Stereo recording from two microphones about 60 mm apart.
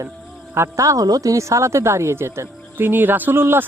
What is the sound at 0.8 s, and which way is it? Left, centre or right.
Speech, right.